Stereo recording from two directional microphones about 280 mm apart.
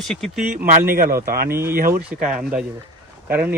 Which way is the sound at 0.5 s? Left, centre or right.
Right.